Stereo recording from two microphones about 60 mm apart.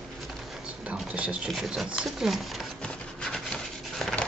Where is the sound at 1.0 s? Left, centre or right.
Right.